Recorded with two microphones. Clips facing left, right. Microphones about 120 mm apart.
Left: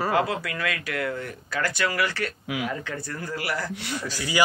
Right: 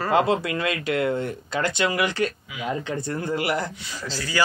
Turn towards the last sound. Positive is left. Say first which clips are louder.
# left 1 dB
turn(degrees=15)  # may be behind; listen again after turning